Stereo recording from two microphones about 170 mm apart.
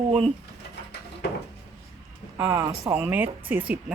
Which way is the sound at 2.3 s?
15° right (ahead or behind).